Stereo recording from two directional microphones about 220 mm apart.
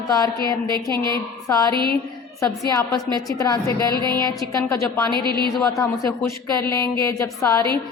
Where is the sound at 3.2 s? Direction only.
15° left (ahead or behind).